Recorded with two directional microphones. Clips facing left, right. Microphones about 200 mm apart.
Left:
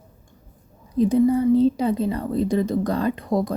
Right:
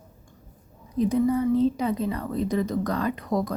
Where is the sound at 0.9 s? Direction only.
30° left (ahead or behind).